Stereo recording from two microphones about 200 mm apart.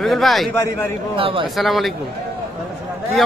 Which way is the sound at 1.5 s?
Centre (ahead or behind).